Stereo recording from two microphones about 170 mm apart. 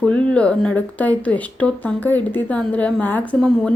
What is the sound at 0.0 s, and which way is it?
Speech, 5° left (ahead or behind).